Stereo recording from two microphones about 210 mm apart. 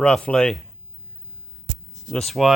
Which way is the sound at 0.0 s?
5° left (ahead or behind).